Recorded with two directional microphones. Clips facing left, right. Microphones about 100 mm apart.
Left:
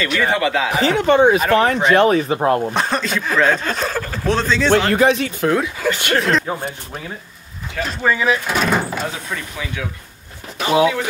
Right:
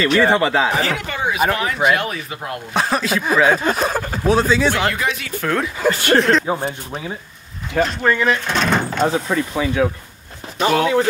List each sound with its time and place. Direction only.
0.0 s speech: 35° right (ahead or behind)
0.8 s speech: 30° left (ahead or behind)
2.7 s speech: 5° right (ahead or behind)
4.9 s speech: 35° left (ahead or behind)
5.3 s speech: 20° left (ahead or behind)
5.9 s speech: 35° right (ahead or behind)
6.5 s speech: 10° right (ahead or behind)
7.8 s speech: 5° left (ahead or behind)
9.0 s speech: 35° right (ahead or behind)